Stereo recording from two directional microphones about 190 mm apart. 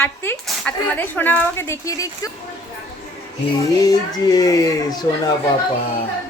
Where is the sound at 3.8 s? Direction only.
20° left (ahead or behind).